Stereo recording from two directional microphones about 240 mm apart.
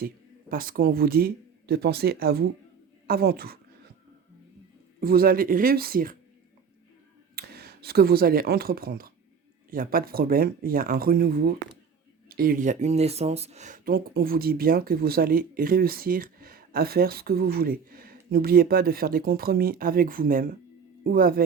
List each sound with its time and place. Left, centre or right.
0.0 s speech: right
4.9 s speech: right
7.3 s speech: right